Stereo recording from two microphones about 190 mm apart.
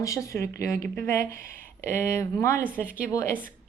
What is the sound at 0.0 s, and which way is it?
A woman's voice, 15° left (ahead or behind).